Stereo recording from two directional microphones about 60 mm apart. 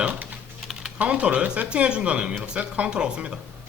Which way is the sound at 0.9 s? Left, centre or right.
Right.